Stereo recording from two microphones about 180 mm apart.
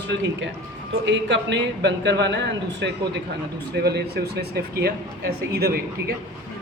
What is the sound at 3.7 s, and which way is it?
Speech, 65° right (ahead or behind).